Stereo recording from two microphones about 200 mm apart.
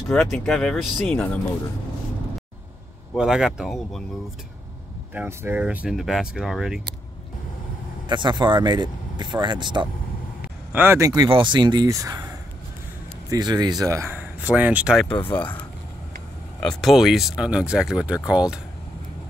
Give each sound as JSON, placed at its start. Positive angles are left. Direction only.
{"t": 0.1, "sound": "speech", "side_deg": 0}
{"t": 3.2, "sound": "speech", "side_deg": 0}
{"t": 5.1, "sound": "speech", "side_deg": -10}
{"t": 8.1, "sound": "speech", "side_deg": -20}
{"t": 10.7, "sound": "speech", "side_deg": -10}
{"t": 13.3, "sound": "speech", "side_deg": -20}
{"t": 15.2, "sound": "speech", "side_deg": 5}
{"t": 16.5, "sound": "speech", "side_deg": 0}